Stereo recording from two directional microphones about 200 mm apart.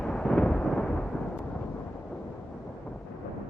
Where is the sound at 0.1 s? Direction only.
5° left (ahead or behind).